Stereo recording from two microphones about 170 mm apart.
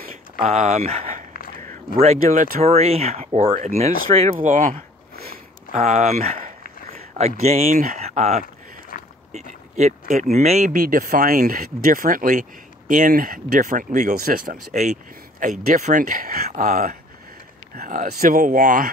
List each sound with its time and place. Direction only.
0.5 s speech: 40° right (ahead or behind)
2.6 s speech: 40° right (ahead or behind)
4.4 s a sound: 50° right (ahead or behind)
5.7 s a sound: 40° right (ahead or behind)
7.2 s speech: 40° right (ahead or behind)
8.9 s a sound: 55° left (ahead or behind)
9.3 s speech: 40° right (ahead or behind)
10.7 s speech: 55° right (ahead or behind)
16.4 s speech: 45° right (ahead or behind)